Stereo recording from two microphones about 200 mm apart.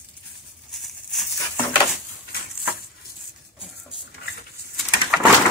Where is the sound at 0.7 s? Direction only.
Centre (ahead or behind).